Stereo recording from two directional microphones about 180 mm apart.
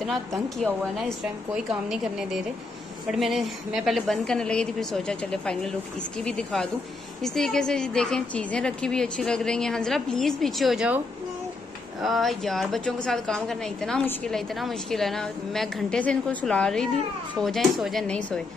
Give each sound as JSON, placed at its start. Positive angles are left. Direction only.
{"t": 1.7, "sound": "a woman's voice", "side_deg": 0}
{"t": 12.0, "sound": "a woman's voice", "side_deg": 0}